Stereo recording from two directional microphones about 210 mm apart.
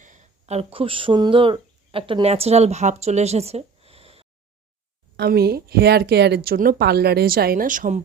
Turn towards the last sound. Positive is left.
turn(degrees=-40)  # may be behind; listen again after turning